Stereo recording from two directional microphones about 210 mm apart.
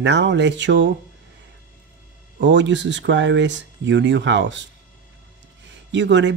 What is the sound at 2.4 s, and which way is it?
Speech, 60° right (ahead or behind).